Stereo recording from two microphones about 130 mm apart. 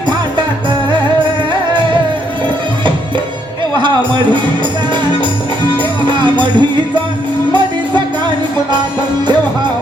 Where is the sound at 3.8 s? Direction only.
35° right (ahead or behind).